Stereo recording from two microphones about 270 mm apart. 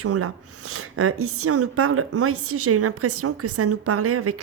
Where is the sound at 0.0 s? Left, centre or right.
Right.